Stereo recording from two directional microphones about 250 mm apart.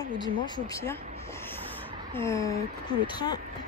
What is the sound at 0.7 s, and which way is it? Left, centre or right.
Speech, centre.